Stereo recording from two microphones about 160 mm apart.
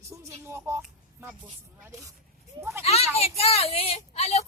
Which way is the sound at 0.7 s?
15° right (ahead or behind).